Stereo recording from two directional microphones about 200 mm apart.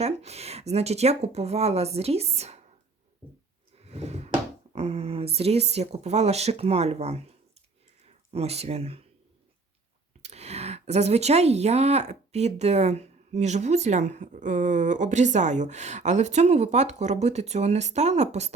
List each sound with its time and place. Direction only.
0.0 s speech: 30° right (ahead or behind)
3.8 s a sound: 30° right (ahead or behind)
4.7 s speech: 30° right (ahead or behind)
10.2 s speech: 30° right (ahead or behind)